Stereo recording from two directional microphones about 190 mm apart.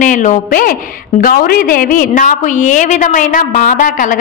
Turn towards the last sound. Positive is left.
turn(degrees=45)  # may be behind; listen again after turning